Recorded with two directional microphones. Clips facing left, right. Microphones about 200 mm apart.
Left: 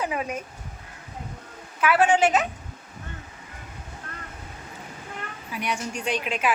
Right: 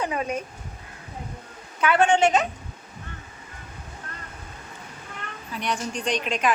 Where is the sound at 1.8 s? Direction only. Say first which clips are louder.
Even; 5° left (ahead or behind).